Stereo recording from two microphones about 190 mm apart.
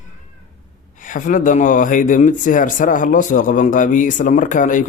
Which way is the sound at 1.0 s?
45° left (ahead or behind).